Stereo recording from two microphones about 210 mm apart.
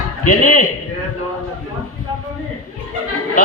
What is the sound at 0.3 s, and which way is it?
Speech, 40° left (ahead or behind).